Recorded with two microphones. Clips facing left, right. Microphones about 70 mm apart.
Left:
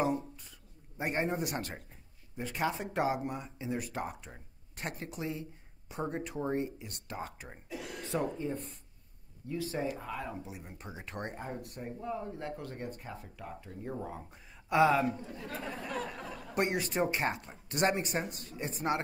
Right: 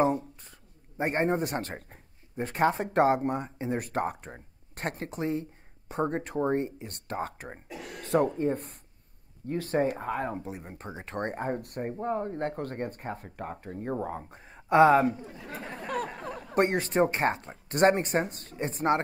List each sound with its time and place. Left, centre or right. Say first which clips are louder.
0.0 s a sound: right 6 dB; right
2.3 s speech: right 8 dB; right
15.0 s speech: right 4 dB; centre
16.5 s speech: right 7 dB; right